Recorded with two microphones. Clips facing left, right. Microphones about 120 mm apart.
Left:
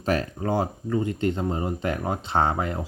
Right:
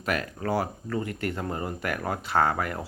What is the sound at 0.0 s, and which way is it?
Speech, 30° left (ahead or behind).